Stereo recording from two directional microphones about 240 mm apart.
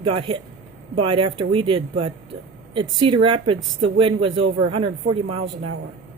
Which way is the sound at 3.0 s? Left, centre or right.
Right.